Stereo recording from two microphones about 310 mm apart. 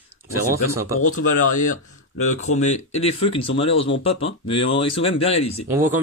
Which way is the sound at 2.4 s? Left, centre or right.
Left.